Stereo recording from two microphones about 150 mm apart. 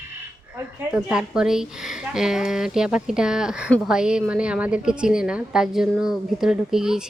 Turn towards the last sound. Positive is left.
turn(degrees=-5)  # may be behind; listen again after turning